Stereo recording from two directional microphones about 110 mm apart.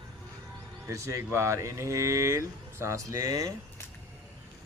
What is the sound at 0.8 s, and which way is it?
Speech, 30° right (ahead or behind).